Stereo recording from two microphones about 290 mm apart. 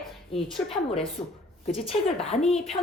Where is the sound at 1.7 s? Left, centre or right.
Centre.